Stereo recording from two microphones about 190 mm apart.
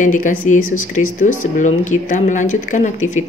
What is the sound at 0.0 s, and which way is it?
Speech, 45° left (ahead or behind).